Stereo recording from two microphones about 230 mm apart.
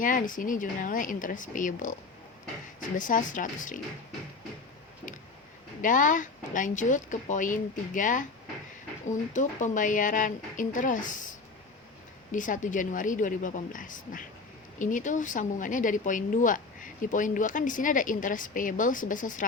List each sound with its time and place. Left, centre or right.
0.0 s speech: left
3.1 s speech: left
5.8 s speech: left
12.3 s speech: left